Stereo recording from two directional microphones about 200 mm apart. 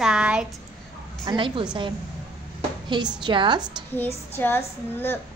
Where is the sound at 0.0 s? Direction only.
5° right (ahead or behind).